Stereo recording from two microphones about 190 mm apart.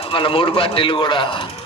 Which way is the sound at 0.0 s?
30° left (ahead or behind).